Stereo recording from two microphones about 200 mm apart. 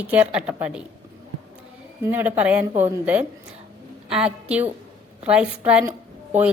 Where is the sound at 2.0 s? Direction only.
10° right (ahead or behind).